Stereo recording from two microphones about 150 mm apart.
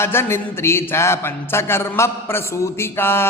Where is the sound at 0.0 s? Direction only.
15° left (ahead or behind).